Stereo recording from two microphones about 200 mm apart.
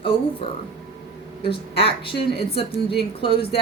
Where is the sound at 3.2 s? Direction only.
25° left (ahead or behind).